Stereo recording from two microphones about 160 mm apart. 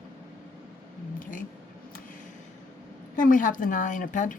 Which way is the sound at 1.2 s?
55° left (ahead or behind).